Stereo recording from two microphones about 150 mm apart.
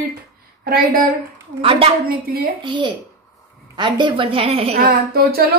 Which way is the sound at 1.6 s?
40° right (ahead or behind).